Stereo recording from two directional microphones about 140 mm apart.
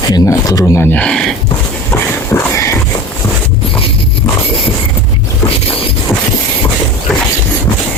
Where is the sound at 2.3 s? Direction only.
20° left (ahead or behind).